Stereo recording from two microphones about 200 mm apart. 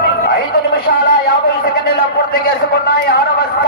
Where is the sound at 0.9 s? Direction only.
55° left (ahead or behind).